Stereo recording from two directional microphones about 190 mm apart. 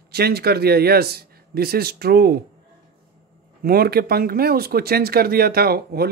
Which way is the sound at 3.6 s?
55° right (ahead or behind).